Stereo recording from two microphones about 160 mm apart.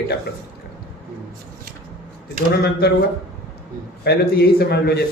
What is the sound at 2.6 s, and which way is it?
Speech, 90° left.